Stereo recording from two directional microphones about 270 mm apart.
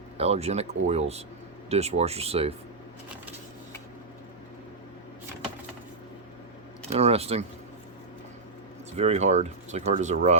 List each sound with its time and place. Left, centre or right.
0.2 s speech: right
6.9 s speech: right
9.0 s speech: right